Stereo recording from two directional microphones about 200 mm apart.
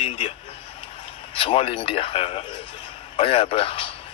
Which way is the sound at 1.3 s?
30° left (ahead or behind).